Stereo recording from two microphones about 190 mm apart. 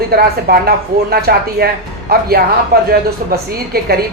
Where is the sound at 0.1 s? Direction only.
55° right (ahead or behind).